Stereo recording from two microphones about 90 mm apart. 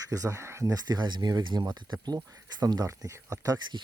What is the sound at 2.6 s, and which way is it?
Speech, 40° right (ahead or behind).